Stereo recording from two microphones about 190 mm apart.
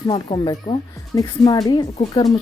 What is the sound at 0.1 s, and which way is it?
Speech, 25° left (ahead or behind).